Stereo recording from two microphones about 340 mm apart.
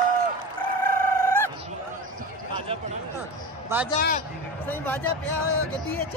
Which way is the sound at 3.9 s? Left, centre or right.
Left.